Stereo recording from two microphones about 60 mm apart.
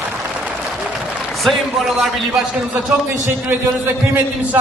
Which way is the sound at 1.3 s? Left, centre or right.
Centre.